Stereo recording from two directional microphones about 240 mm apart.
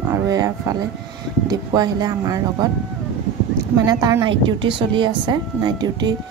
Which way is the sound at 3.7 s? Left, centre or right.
Centre.